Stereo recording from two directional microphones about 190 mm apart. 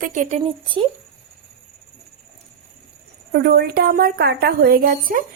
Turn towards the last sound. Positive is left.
turn(degrees=-50)  # may be behind; listen again after turning